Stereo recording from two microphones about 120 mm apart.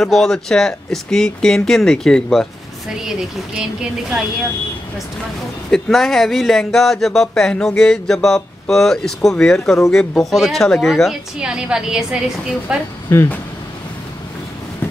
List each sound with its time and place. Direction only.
0.0 s speech: 5° left (ahead or behind)
2.9 s speech: 5° right (ahead or behind)
5.7 s speech: centre (ahead or behind)
13.1 s speech: 20° left (ahead or behind)